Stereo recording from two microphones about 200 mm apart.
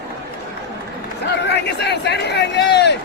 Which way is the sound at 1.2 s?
55° left (ahead or behind).